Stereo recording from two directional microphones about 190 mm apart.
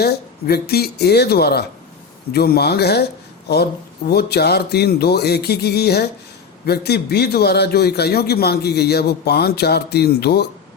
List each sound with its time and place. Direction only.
0.0 s a man's voice: 55° left (ahead or behind)